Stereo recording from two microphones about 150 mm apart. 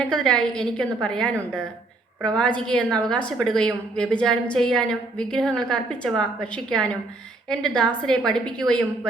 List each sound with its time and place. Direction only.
0.0 s a woman's voice: 5° left (ahead or behind)